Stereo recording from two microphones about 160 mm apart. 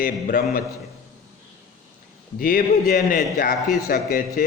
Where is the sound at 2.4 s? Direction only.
60° left (ahead or behind).